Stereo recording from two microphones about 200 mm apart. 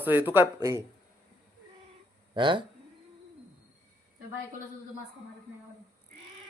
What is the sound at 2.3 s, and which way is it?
Speech, 25° right (ahead or behind).